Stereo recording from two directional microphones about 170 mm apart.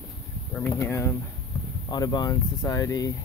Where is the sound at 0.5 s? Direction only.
15° left (ahead or behind).